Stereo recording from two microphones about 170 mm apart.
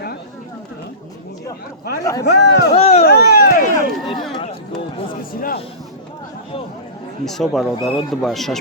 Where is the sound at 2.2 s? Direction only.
70° left (ahead or behind).